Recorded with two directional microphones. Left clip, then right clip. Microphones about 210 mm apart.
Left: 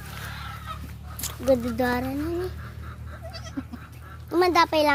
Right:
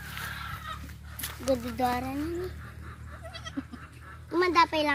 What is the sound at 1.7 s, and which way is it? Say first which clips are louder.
Speech: left 3 dB; 45° left (ahead or behind).